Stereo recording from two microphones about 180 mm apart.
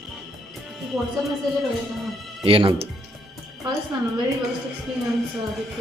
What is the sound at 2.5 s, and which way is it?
Speech, 30° right (ahead or behind).